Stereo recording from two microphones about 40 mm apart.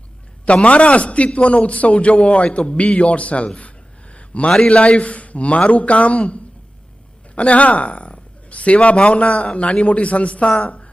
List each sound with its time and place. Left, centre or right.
0.4 s a man's voice: left
4.1 s a sound: left
4.7 s a man's voice: left